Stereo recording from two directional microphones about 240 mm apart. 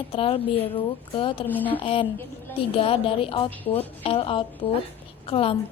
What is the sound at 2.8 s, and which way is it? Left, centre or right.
A woman's voice, left.